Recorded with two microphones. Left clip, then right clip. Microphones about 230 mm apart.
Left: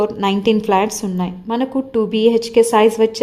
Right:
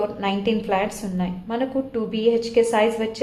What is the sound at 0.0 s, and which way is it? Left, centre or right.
A woman's voice, left.